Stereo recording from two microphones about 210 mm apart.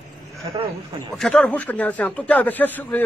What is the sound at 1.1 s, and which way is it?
A man's voice, 5° left (ahead or behind).